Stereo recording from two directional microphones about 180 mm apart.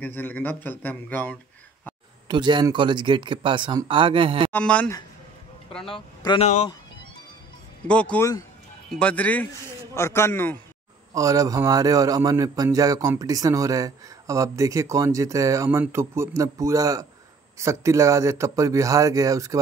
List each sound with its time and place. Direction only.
0.0 s a man's voice: 10° left (ahead or behind)
2.2 s a man's voice: 25° right (ahead or behind)
4.5 s speech: 10° left (ahead or behind)
5.9 s speech: 30° left (ahead or behind)
7.8 s a man's voice: 5° left (ahead or behind)
11.1 s a man's voice: 20° right (ahead or behind)